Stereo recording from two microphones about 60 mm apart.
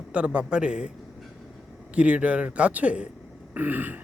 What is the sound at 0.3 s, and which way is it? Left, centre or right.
Speech, centre.